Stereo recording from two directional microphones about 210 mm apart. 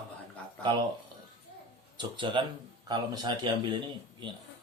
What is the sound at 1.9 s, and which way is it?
A man's voice, 25° right (ahead or behind).